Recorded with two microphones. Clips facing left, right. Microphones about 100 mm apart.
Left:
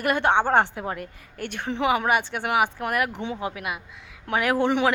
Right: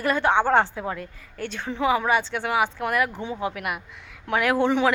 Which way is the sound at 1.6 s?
20° left (ahead or behind).